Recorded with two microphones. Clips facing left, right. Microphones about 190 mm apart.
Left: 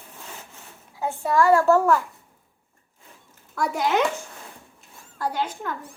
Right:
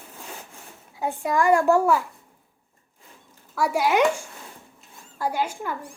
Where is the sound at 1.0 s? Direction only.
15° right (ahead or behind).